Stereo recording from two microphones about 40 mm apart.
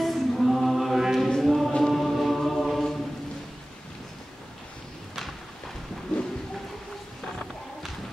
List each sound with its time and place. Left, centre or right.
0.0 s choir: centre
1.8 s music: centre
6.1 s a sound: left